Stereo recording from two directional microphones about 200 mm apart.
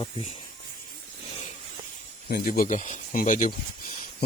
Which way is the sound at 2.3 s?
45° left (ahead or behind).